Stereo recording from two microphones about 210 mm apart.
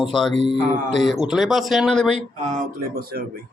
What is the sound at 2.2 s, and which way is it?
Speech, 35° right (ahead or behind).